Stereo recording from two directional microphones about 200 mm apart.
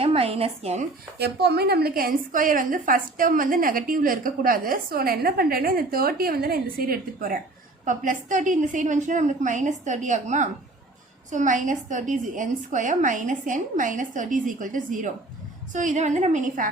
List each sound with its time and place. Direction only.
0.0 s speech: 30° right (ahead or behind)
1.2 s a woman's voice: 55° right (ahead or behind); by 16.6 s 35° right (ahead or behind)